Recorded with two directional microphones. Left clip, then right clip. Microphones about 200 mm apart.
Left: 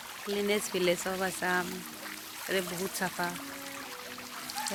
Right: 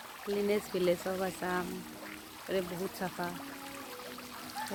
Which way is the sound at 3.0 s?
5° left (ahead or behind).